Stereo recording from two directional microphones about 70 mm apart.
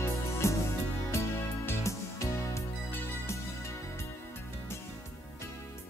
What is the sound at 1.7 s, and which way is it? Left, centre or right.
Music, left.